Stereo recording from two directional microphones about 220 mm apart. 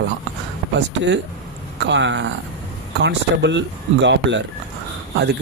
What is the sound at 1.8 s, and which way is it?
Speech, 55° right (ahead or behind).